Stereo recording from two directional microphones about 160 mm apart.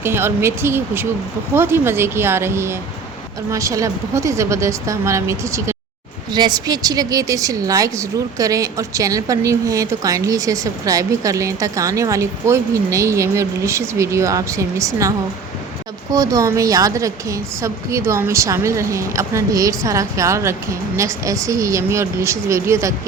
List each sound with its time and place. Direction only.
0.0 s a woman's voice: 15° right (ahead or behind)
16.1 s a woman's voice: 20° right (ahead or behind)